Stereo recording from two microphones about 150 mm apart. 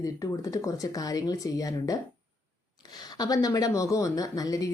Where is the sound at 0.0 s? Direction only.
25° left (ahead or behind).